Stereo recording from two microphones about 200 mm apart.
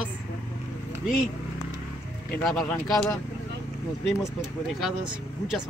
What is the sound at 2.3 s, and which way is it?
Speech, centre (ahead or behind).